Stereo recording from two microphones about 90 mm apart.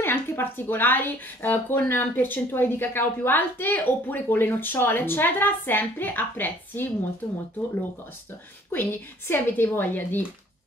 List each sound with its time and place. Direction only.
0.0 s a woman's voice: 25° left (ahead or behind)
8.7 s a woman's voice: 25° left (ahead or behind)